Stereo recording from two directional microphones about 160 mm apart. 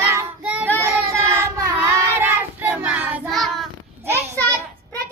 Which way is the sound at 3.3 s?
Centre (ahead or behind).